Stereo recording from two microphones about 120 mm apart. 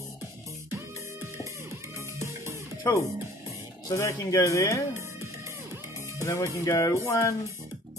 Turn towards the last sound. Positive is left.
turn(degrees=25)  # may be behind; listen again after turning